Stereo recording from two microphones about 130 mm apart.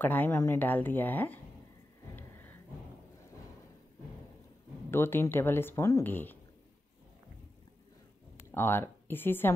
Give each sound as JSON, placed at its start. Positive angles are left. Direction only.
{"t": 0.0, "sound": "speech", "side_deg": 15}
{"t": 4.9, "sound": "speech", "side_deg": 20}
{"t": 8.5, "sound": "speech", "side_deg": 15}